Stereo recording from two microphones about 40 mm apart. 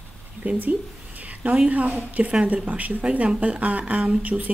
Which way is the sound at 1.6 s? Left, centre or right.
Right.